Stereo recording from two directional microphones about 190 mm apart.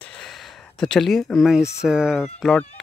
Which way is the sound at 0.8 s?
5° left (ahead or behind).